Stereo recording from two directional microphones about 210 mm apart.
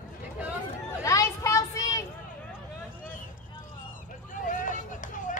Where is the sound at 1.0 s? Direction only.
15° left (ahead or behind).